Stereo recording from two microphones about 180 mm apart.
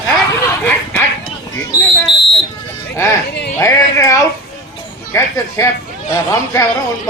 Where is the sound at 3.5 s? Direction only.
15° left (ahead or behind).